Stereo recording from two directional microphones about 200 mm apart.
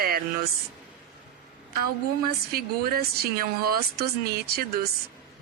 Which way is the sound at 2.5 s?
50° right (ahead or behind).